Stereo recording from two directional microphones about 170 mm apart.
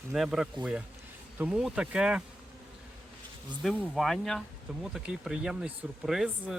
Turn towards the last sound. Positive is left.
turn(degrees=-5)  # may be behind; listen again after turning